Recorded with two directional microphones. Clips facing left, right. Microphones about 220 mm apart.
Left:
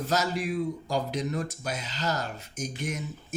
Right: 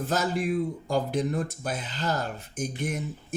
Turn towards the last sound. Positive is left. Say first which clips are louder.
# right 2 dB
turn(degrees=-55)  # may be behind; listen again after turning